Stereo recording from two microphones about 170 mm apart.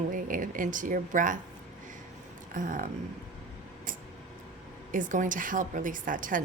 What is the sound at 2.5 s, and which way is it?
Speech, 50° right (ahead or behind).